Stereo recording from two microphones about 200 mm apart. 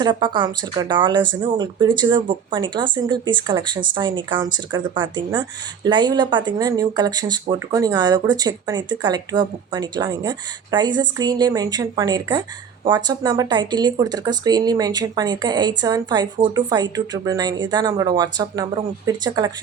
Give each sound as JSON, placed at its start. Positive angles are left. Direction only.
{"t": 0.0, "sound": "speech", "side_deg": -25}